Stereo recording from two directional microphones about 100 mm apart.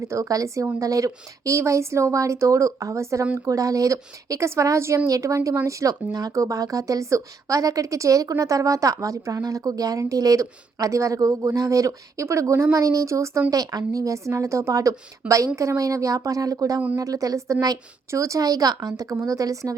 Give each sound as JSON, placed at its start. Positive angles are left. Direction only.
{"t": 0.0, "sound": "speech", "side_deg": -30}